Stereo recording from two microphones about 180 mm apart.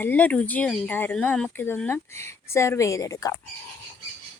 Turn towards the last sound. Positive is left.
turn(degrees=20)  # may be behind; listen again after turning